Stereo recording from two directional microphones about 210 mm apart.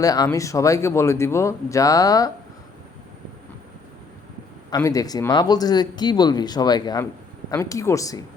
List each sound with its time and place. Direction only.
0.0 s speech: 15° left (ahead or behind)
4.7 s speech: 15° left (ahead or behind)